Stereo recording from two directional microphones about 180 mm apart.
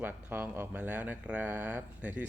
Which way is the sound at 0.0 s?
10° right (ahead or behind).